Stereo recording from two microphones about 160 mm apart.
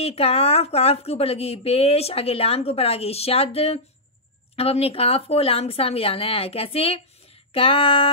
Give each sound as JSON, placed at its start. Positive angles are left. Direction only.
{"t": 0.0, "sound": "speech", "side_deg": 40}